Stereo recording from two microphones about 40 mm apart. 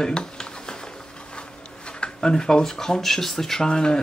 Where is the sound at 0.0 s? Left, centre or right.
Centre.